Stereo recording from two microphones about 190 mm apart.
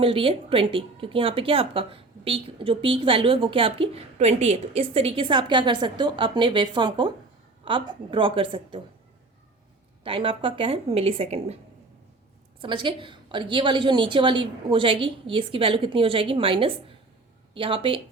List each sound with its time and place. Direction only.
0.0 s speech: 30° right (ahead or behind)
10.0 s speech: 25° right (ahead or behind)
12.6 s speech: 25° right (ahead or behind)